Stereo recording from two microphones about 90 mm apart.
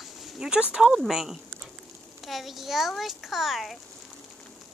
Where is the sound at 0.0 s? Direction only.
5° right (ahead or behind).